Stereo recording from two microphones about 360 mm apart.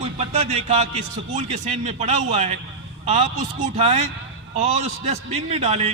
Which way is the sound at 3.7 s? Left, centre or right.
Centre.